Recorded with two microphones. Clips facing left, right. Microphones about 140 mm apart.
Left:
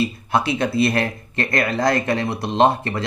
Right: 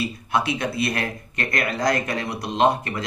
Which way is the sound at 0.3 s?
30° left (ahead or behind).